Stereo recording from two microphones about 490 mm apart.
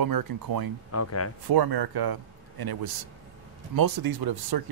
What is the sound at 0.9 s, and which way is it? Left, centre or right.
Speech, left.